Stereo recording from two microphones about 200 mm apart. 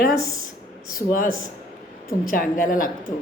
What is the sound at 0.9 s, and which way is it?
A woman's voice, 45° left (ahead or behind).